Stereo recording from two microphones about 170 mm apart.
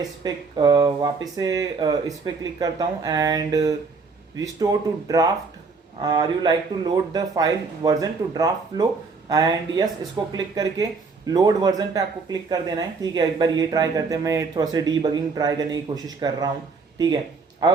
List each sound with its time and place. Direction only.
0.2 s speech: 25° right (ahead or behind)